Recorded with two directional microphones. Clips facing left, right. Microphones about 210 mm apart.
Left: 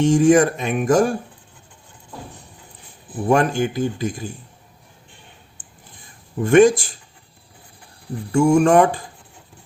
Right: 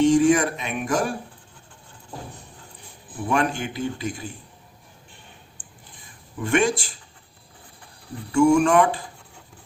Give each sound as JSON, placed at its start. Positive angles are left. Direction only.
{"t": 0.1, "sound": "speech", "side_deg": 45}
{"t": 3.2, "sound": "speech", "side_deg": 45}
{"t": 6.4, "sound": "speech", "side_deg": 45}
{"t": 8.3, "sound": "speech", "side_deg": 40}